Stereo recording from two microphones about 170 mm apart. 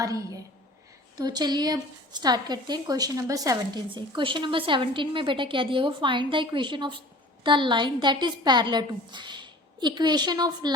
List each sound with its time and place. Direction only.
0.0 s a woman's voice: 20° right (ahead or behind)